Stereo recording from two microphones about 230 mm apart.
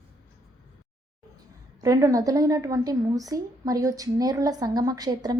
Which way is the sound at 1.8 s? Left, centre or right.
Centre.